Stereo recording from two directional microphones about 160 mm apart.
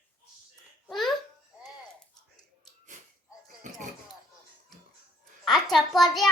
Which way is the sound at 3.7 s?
50° right (ahead or behind).